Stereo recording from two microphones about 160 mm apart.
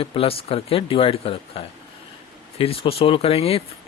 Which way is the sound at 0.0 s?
35° left (ahead or behind).